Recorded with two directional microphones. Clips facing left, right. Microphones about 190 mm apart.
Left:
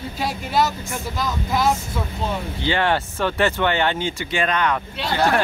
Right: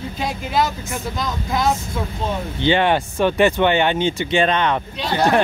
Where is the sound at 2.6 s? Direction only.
20° right (ahead or behind).